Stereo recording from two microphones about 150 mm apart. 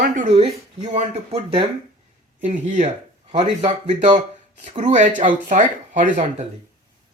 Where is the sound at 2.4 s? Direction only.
55° right (ahead or behind).